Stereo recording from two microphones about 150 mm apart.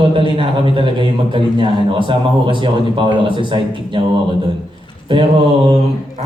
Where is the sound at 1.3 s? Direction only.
35° right (ahead or behind).